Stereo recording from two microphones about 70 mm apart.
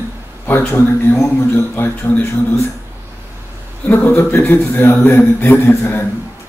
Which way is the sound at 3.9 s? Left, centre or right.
Left.